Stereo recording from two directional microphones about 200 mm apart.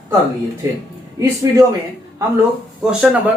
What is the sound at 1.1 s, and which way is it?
Speech, 15° right (ahead or behind).